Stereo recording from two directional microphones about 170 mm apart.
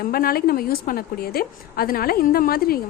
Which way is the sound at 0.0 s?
60° left (ahead or behind).